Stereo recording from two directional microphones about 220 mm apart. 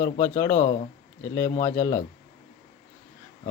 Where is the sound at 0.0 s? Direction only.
15° left (ahead or behind).